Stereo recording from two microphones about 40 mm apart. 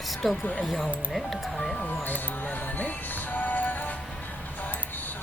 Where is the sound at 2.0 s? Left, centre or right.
Left.